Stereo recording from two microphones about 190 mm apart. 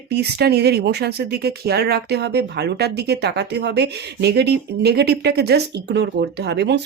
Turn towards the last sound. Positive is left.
turn(degrees=-65)  # may be behind; listen again after turning